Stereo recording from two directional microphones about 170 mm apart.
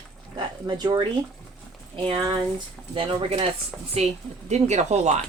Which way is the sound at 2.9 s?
30° right (ahead or behind).